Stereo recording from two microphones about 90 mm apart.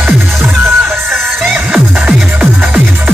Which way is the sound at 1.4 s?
5° right (ahead or behind).